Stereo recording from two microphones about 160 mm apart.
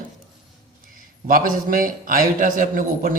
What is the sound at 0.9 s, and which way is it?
A man's voice, 60° right (ahead or behind).